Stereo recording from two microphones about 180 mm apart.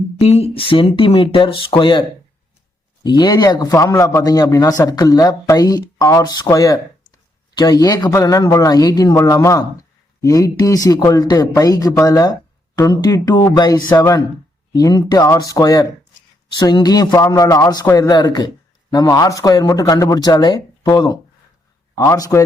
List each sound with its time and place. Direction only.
0.2 s a man's voice: 35° left (ahead or behind); by 22.4 s 15° left (ahead or behind)